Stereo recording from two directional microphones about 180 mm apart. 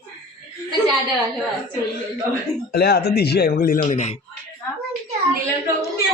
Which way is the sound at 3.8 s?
40° left (ahead or behind).